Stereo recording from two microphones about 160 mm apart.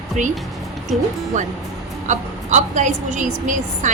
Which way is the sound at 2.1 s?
50° right (ahead or behind).